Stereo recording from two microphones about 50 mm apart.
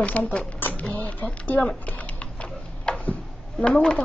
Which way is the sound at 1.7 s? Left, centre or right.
Left.